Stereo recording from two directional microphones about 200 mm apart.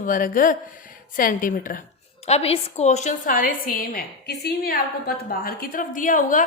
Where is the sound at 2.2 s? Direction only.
30° left (ahead or behind).